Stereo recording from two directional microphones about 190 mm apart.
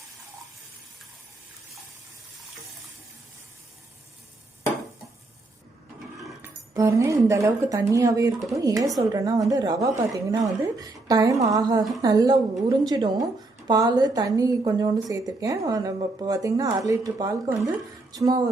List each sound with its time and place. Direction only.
6.4 s a woman's voice: 15° right (ahead or behind)